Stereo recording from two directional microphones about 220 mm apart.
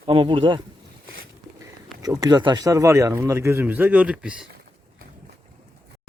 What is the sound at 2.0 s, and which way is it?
A man's voice, 15° right (ahead or behind).